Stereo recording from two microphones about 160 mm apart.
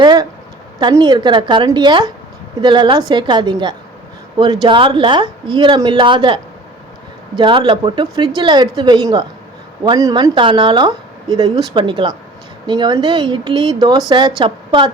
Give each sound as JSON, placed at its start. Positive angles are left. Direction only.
{"t": 0.0, "sound": "a woman's voice", "side_deg": -25}
{"t": 4.6, "sound": "a woman's voice", "side_deg": -30}